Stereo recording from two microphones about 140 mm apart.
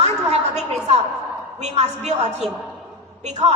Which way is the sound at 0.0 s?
50° right (ahead or behind).